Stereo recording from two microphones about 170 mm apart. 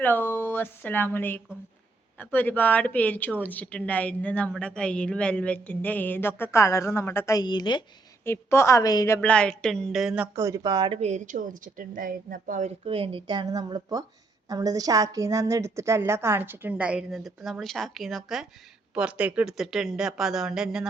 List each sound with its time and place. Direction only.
0.0 s speech: 10° left (ahead or behind)
8.2 s speech: 15° left (ahead or behind); by 10.2 s centre (ahead or behind)
10.3 s a woman's voice: 20° right (ahead or behind); by 12.7 s 50° right (ahead or behind)
12.8 s a woman's voice: 35° right (ahead or behind); by 20.8 s 5° right (ahead or behind)